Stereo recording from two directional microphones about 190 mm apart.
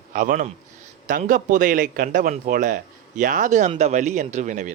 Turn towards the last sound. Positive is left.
turn(degrees=-40)  # may be behind; listen again after turning